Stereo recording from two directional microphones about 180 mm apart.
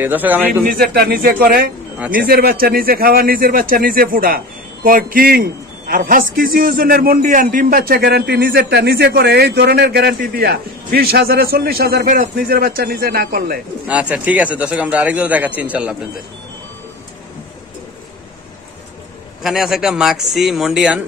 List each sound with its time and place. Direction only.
0.0 s a man's voice: 10° right (ahead or behind)
0.7 s a man's voice: 55° right (ahead or behind)
2.0 s speech: 10° right (ahead or behind)
2.2 s a man's voice: 55° right (ahead or behind)
13.8 s a man's voice: 5° right (ahead or behind)
19.4 s speech: centre (ahead or behind)